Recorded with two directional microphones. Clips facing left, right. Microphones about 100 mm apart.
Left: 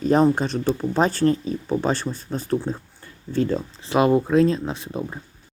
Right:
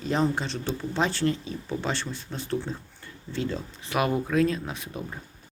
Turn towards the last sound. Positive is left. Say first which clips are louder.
# left 7 dB
turn(degrees=30)  # may be behind; listen again after turning